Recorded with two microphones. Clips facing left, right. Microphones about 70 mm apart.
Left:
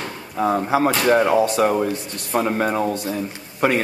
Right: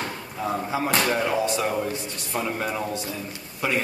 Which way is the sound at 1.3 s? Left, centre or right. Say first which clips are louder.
Left 7 dB; left.